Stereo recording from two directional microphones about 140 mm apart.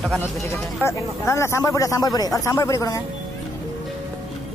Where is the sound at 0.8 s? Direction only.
20° left (ahead or behind).